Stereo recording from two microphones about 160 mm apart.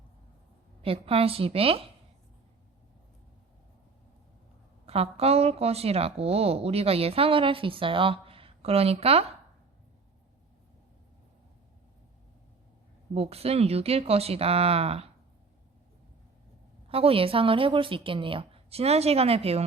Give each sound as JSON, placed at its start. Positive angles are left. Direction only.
{"t": 0.8, "sound": "speech", "side_deg": -35}
{"t": 4.9, "sound": "speech", "side_deg": -40}
{"t": 13.1, "sound": "speech", "side_deg": -40}
{"t": 16.9, "sound": "speech", "side_deg": -35}